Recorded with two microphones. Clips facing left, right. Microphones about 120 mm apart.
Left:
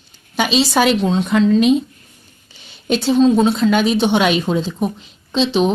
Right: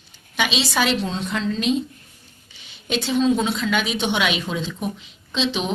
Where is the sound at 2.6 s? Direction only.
40° left (ahead or behind).